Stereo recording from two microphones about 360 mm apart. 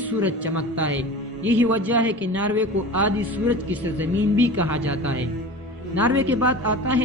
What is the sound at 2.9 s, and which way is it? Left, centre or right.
Speech, right.